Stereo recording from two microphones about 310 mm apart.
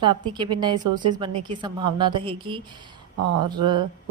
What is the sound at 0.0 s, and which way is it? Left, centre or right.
A woman's voice, centre.